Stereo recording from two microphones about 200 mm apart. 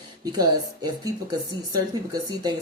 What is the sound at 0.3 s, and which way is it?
Speech, 20° right (ahead or behind).